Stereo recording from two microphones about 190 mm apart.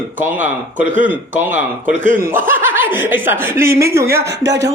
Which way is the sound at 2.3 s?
10° right (ahead or behind).